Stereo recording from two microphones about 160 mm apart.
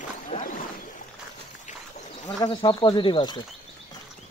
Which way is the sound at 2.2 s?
30° left (ahead or behind).